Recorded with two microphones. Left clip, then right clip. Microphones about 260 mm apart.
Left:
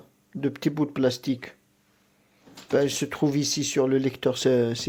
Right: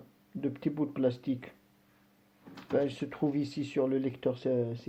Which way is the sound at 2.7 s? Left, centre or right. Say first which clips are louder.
Left 7 dB; left.